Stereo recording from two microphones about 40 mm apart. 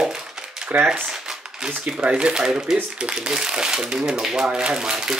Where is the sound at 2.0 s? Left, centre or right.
Right.